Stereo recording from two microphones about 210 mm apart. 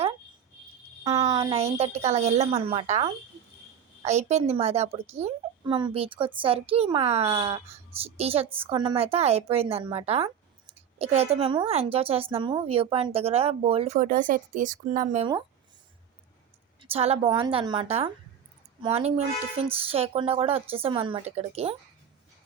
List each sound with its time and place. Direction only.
1.0 s a woman's voice: 20° right (ahead or behind); by 15.3 s 35° right (ahead or behind)
16.8 s a woman's voice: 30° right (ahead or behind)